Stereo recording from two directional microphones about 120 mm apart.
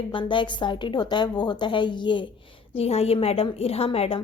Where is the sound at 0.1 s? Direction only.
45° left (ahead or behind).